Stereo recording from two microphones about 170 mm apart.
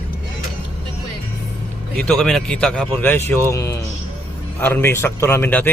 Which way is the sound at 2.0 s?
Centre (ahead or behind).